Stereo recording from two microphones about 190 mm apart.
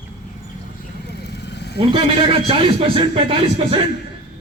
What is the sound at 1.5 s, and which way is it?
Vehicle, 60° left (ahead or behind).